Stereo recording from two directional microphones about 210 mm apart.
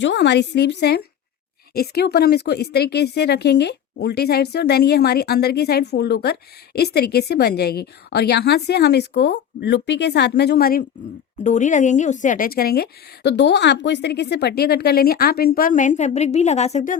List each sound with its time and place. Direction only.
0.0 s a woman's voice: 55° left (ahead or behind); by 17.0 s 35° left (ahead or behind)